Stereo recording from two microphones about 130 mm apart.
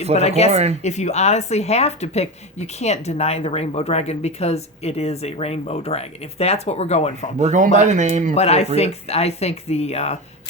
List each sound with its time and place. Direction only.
0.2 s speech: 55° left (ahead or behind)
0.5 s speech: 55° right (ahead or behind)
0.8 s speech: 60° left (ahead or behind)
7.3 s speech: 70° right (ahead or behind)
8.4 s speech: 55° left (ahead or behind)